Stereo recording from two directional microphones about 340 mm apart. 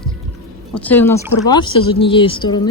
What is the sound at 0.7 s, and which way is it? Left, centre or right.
Speech, centre.